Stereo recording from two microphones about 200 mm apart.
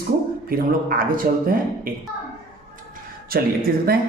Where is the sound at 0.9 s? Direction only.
45° right (ahead or behind).